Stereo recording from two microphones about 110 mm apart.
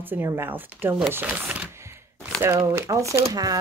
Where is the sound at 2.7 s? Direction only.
25° right (ahead or behind).